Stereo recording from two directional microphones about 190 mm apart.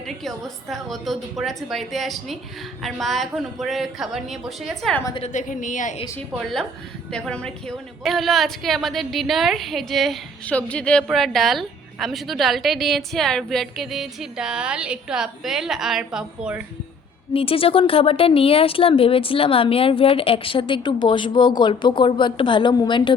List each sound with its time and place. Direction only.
0.0 s a woman's voice: centre (ahead or behind)
5.2 s a woman's voice: 40° left (ahead or behind)
6.3 s a woman's voice: centre (ahead or behind)
17.3 s speech: 30° left (ahead or behind)